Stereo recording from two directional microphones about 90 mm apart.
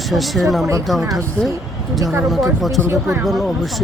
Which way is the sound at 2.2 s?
Centre (ahead or behind).